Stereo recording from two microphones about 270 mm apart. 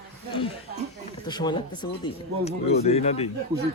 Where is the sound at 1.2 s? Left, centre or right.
Centre.